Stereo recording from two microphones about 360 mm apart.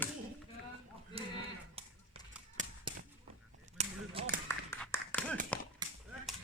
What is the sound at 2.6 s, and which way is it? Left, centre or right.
Whip, right.